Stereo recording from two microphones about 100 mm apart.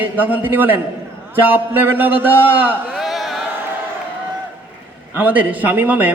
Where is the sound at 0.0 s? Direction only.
15° right (ahead or behind).